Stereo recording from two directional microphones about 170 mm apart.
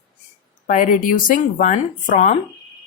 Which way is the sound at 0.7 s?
45° left (ahead or behind).